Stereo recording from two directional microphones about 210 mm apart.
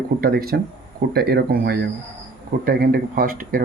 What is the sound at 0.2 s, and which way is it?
Speech, 45° right (ahead or behind).